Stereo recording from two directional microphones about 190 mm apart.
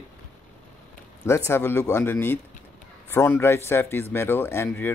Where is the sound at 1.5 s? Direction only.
10° left (ahead or behind).